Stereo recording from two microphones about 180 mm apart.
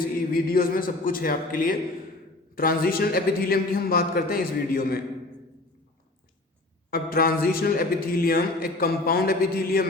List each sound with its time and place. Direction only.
0.0 s a man's voice: 55° left (ahead or behind)
6.9 s a man's voice: 55° left (ahead or behind)